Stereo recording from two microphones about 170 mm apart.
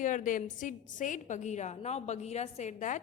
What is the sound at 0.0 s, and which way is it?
A woman's voice, 50° left (ahead or behind).